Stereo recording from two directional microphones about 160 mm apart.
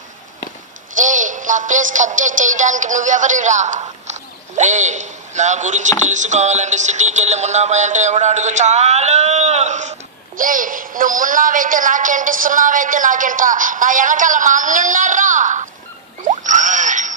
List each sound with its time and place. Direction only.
0.9 s music: 50° right (ahead or behind)
6.1 s a sound: 50° right (ahead or behind)
10.3 s a woman's voice: 55° right (ahead or behind)
16.4 s mechanisms: 50° right (ahead or behind)